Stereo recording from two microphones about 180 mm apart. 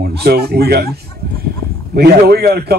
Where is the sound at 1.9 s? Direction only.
60° right (ahead or behind).